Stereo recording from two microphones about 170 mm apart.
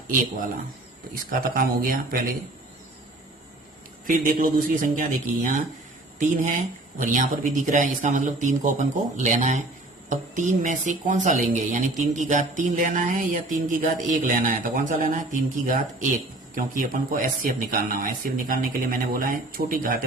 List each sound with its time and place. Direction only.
1.1 s speech: 55° right (ahead or behind)
4.0 s a man's voice: 50° right (ahead or behind)